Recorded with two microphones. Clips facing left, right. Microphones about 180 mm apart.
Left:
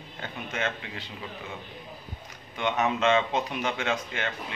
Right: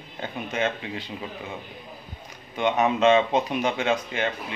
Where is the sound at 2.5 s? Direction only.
15° right (ahead or behind).